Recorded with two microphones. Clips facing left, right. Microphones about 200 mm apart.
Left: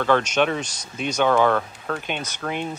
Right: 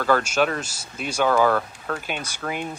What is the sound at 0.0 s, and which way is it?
Speech, 5° right (ahead or behind).